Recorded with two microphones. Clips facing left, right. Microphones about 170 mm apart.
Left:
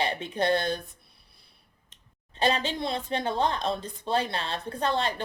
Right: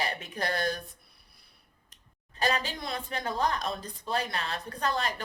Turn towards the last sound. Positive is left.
turn(degrees=30)  # may be behind; listen again after turning